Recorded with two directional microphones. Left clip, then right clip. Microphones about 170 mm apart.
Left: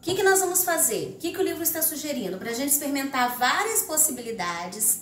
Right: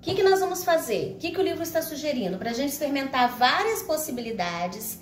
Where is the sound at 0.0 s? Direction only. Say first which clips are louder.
Even; 40° right (ahead or behind).